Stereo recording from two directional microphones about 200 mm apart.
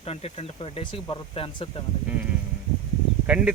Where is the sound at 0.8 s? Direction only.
25° left (ahead or behind).